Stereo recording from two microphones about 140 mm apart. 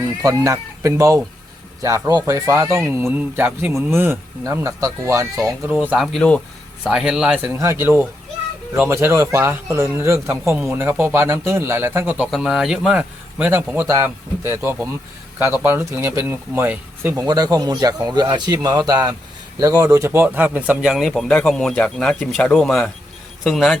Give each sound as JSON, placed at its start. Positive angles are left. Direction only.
{"t": 0.2, "sound": "speech", "side_deg": -25}
{"t": 6.1, "sound": "speech", "side_deg": 10}
{"t": 6.8, "sound": "speech", "side_deg": -5}
{"t": 12.2, "sound": "speech", "side_deg": 0}
{"t": 17.2, "sound": "speech", "side_deg": -25}